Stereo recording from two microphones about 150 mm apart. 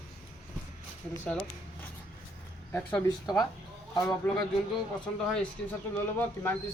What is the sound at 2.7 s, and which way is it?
Speech, 10° left (ahead or behind).